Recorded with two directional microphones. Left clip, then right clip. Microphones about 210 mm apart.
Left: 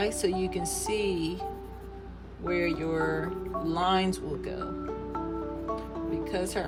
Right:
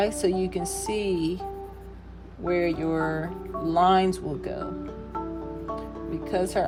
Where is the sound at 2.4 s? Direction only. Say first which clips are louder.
Right 4 dB; 25° right (ahead or behind).